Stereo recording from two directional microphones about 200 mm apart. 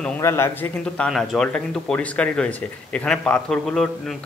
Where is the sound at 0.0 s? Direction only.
15° left (ahead or behind).